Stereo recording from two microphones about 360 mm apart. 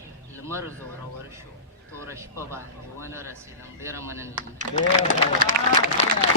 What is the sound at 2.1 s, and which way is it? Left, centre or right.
A man's voice, centre.